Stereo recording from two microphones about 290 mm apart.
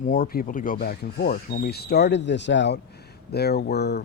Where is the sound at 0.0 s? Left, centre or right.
Left.